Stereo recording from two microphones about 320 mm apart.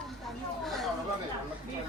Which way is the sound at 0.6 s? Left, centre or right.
Centre.